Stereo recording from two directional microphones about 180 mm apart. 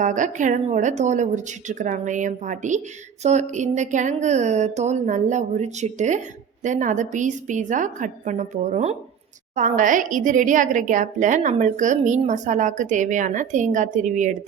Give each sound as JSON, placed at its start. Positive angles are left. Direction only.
{"t": 0.0, "sound": "a woman's voice", "side_deg": -45}